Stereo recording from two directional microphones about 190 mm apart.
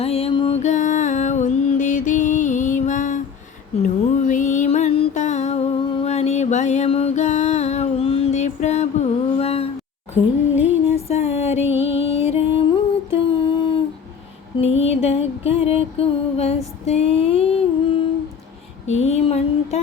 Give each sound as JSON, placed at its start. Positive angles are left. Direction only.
{"t": 0.0, "sound": "music", "side_deg": 30}
{"t": 10.8, "sound": "music", "side_deg": 35}
{"t": 12.3, "sound": "a sound", "side_deg": 30}
{"t": 14.6, "sound": "music", "side_deg": 30}